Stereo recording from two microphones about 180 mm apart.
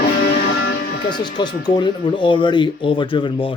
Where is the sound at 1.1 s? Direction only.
25° left (ahead or behind).